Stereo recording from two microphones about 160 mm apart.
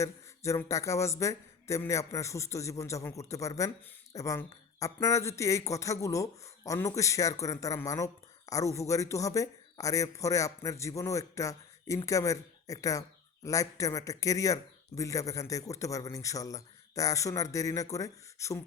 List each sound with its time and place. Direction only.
0.0 s speech: 20° left (ahead or behind)